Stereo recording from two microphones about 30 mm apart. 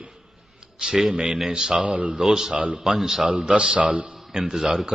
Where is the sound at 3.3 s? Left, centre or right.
Right.